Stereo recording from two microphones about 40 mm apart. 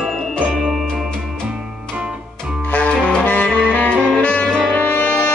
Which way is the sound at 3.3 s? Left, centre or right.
Left.